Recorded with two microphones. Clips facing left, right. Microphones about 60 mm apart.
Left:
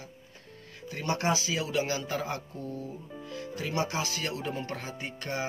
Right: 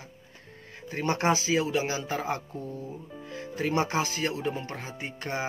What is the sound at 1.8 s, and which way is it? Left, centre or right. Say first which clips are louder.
Speech: right 1 dB; centre.